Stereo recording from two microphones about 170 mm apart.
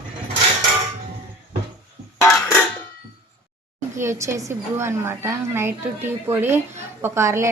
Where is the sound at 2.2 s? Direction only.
10° left (ahead or behind).